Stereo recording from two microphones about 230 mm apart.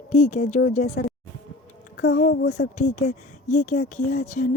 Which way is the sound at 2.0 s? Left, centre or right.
Left.